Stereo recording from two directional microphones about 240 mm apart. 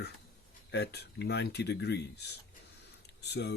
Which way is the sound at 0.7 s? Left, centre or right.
Left.